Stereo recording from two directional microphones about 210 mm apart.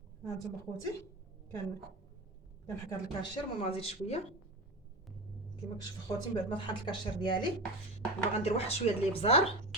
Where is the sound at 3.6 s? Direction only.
30° left (ahead or behind).